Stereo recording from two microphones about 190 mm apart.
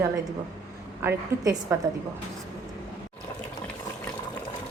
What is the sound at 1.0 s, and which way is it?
Speech, 15° right (ahead or behind).